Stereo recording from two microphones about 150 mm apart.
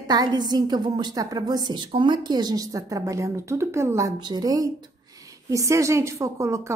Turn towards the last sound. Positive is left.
turn(degrees=-20)  # may be behind; listen again after turning